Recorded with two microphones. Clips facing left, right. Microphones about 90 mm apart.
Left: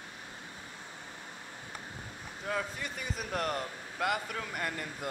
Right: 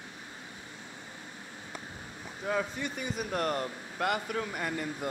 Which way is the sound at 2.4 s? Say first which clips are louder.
Right 4 dB; 5° right (ahead or behind).